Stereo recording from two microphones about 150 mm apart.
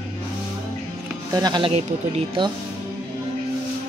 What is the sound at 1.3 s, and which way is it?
Speech, 30° right (ahead or behind).